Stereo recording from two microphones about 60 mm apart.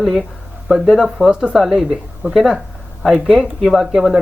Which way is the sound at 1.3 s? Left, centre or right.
Centre.